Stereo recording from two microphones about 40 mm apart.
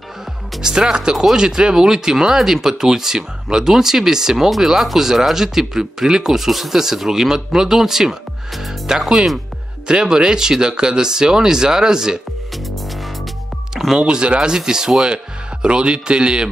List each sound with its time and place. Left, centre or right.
0.6 s speech: centre
1.1 s speech: centre
13.9 s speech: right
15.6 s speech: right